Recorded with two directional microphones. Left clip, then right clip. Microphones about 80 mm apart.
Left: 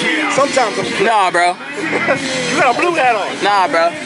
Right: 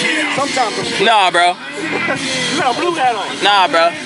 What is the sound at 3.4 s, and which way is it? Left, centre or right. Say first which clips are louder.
Speech: right 2 dB; centre.